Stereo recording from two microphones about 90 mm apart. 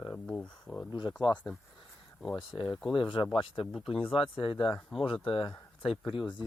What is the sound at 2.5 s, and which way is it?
Speech, 40° left (ahead or behind).